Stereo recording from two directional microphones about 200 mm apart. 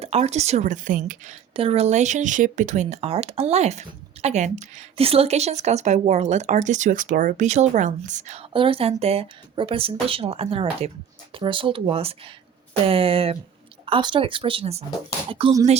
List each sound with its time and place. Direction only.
0.0 s speech: 30° right (ahead or behind)
1.5 s speech: 30° right (ahead or behind)